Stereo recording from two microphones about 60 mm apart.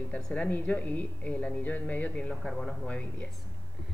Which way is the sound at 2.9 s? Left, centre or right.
Left.